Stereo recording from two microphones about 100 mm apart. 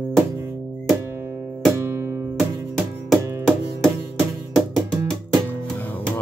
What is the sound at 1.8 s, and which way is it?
Music, 30° right (ahead or behind).